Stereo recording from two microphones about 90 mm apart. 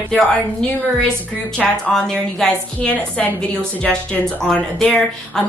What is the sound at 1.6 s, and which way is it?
A woman's voice, 5° left (ahead or behind).